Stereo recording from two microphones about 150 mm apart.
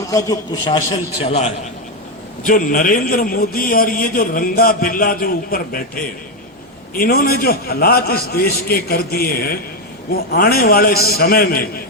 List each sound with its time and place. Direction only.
0.1 s a man's voice: 20° left (ahead or behind)
1.2 s a man's voice: 45° left (ahead or behind)
2.4 s a man's voice: 65° left (ahead or behind)